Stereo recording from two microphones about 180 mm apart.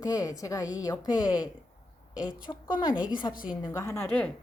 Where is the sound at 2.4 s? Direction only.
25° left (ahead or behind).